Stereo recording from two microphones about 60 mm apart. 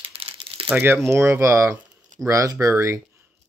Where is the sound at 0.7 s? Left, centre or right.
Right.